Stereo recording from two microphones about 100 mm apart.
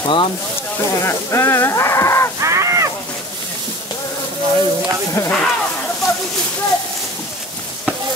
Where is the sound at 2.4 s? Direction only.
30° right (ahead or behind).